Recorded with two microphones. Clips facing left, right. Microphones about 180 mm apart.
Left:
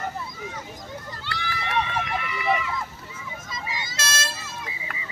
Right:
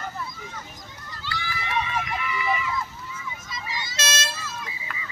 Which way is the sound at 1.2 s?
60° left (ahead or behind).